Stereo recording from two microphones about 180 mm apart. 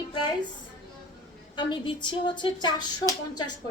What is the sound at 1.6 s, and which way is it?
Speech, 25° left (ahead or behind).